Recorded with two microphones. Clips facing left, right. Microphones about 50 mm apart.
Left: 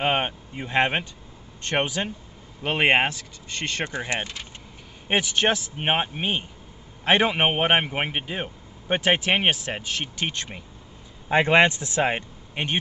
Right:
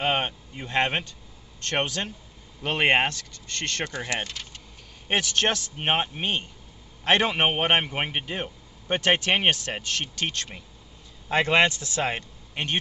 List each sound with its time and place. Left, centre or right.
0.0 s a man's voice: centre